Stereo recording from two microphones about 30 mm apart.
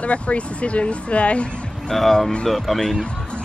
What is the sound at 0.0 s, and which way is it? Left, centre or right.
Speech, left.